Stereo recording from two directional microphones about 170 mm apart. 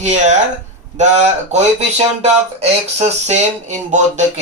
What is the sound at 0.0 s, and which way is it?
Speech, 45° right (ahead or behind).